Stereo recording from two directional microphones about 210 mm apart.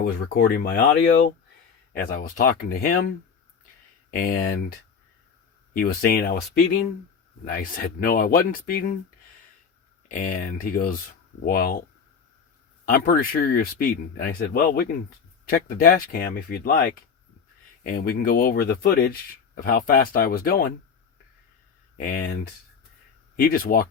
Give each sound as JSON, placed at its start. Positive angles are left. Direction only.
{"t": 0.0, "sound": "speech", "side_deg": 45}
{"t": 4.1, "sound": "speech", "side_deg": 45}
{"t": 5.7, "sound": "speech", "side_deg": 45}
{"t": 10.1, "sound": "speech", "side_deg": 40}
{"t": 12.9, "sound": "speech", "side_deg": 45}
{"t": 17.8, "sound": "speech", "side_deg": 45}
{"t": 21.9, "sound": "speech", "side_deg": 40}
{"t": 23.4, "sound": "speech", "side_deg": 45}